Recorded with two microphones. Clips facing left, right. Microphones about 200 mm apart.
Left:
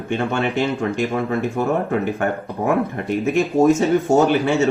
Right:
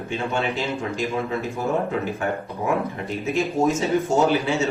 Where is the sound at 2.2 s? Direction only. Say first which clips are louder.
Left 4 dB; 60° left (ahead or behind).